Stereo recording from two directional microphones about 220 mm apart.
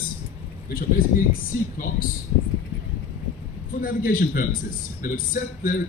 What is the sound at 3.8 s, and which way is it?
A man's voice, 40° left (ahead or behind).